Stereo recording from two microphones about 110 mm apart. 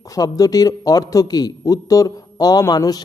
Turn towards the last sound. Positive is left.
turn(degrees=35)  # may be behind; listen again after turning